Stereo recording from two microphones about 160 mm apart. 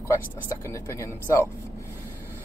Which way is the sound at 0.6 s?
15° left (ahead or behind).